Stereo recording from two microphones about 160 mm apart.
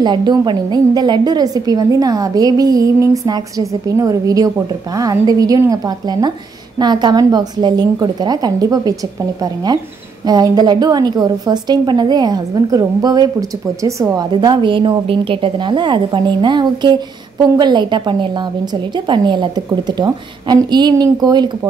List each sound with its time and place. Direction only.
0.0 s a woman's voice: 25° right (ahead or behind)